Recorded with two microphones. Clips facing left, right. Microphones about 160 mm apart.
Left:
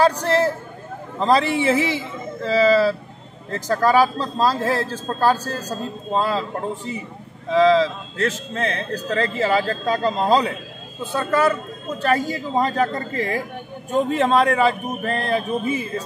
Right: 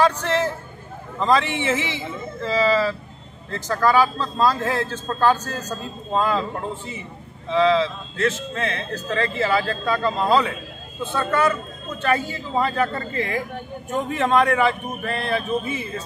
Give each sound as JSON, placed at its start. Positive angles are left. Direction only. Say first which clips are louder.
{"t": 1.2, "sound": "speech", "louder": "left 3 dB", "side_deg": 35}